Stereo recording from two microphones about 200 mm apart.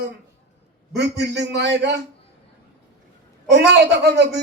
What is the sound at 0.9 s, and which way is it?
Speech, 55° right (ahead or behind).